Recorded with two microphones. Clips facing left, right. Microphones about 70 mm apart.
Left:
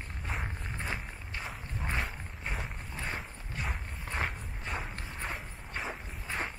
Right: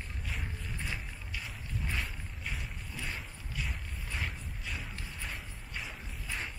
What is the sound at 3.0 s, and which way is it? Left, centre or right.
Walk, left.